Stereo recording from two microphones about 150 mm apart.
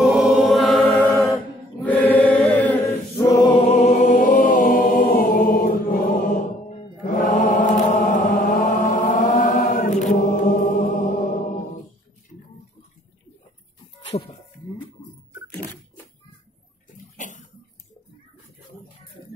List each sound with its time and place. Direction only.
0.0 s choir: 5° right (ahead or behind)
1.3 s chant: 10° left (ahead or behind)
3.2 s choir: 30° left (ahead or behind)
3.6 s chant: 50° left (ahead or behind); by 5.9 s 70° left (ahead or behind)
7.1 s mantra: 65° left (ahead or behind)
14.1 s a sound: 45° left (ahead or behind)
17.2 s a sound: 55° left (ahead or behind)